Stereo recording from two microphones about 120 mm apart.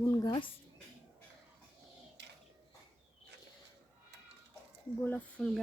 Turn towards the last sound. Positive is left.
turn(degrees=10)  # may be behind; listen again after turning